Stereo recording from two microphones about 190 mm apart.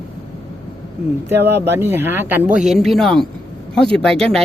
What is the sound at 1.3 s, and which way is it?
Speech, 10° right (ahead or behind).